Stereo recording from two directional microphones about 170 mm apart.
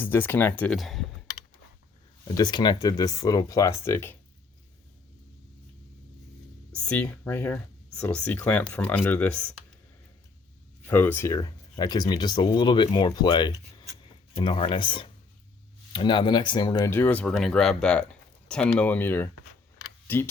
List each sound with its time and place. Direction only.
0.0 s speech: 10° left (ahead or behind)
2.2 s speech: 20° left (ahead or behind)
6.7 s speech: 10° left (ahead or behind)
10.8 s speech: 10° left (ahead or behind)
16.9 s speech: 10° left (ahead or behind)